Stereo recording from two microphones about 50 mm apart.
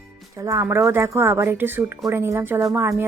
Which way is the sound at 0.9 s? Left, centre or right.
Right.